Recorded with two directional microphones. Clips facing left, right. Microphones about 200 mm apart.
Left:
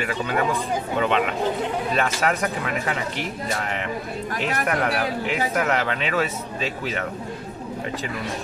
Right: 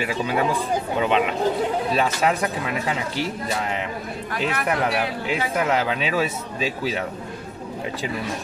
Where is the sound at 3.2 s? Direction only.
60° left (ahead or behind).